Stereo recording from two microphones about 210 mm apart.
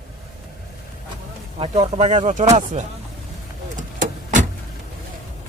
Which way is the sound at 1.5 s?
25° right (ahead or behind).